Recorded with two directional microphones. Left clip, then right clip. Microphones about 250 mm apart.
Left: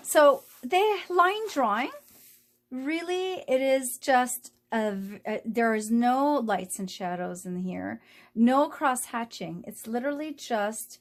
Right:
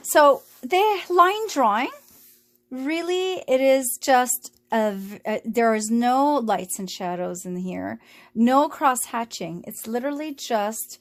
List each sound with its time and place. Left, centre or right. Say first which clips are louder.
0.1 s a woman's voice: right 4 dB; right